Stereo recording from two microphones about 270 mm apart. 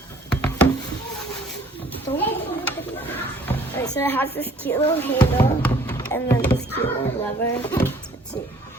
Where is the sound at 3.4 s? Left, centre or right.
Centre.